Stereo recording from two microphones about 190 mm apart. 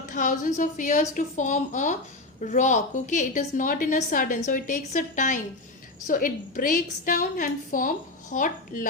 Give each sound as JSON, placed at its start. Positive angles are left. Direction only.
{"t": 0.0, "sound": "a woman's voice", "side_deg": 45}